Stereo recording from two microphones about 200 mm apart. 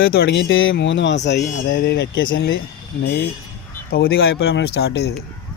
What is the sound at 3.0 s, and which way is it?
Speech, 55° left (ahead or behind).